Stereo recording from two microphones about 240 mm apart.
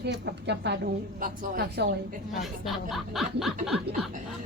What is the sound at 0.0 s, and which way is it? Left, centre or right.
A woman's voice, right.